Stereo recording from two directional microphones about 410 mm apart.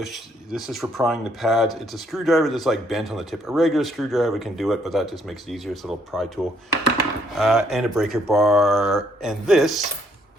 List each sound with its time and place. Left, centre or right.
0.0 s speech: centre